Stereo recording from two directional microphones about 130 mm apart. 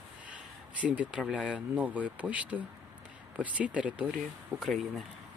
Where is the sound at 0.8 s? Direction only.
10° right (ahead or behind).